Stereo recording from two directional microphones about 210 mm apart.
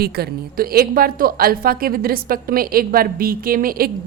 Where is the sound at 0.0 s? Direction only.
50° right (ahead or behind).